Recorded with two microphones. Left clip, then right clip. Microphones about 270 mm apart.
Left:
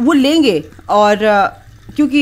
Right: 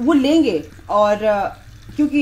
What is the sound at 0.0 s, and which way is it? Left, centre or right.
A woman's voice, left.